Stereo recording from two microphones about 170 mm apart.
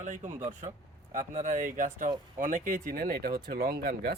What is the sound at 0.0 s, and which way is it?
Speech, 45° right (ahead or behind).